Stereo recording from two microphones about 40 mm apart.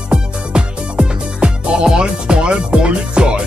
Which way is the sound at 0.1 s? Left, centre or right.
Right.